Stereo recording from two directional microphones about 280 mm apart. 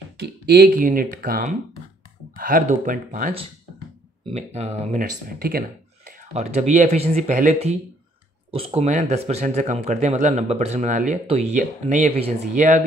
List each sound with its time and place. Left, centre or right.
0.2 s speech: right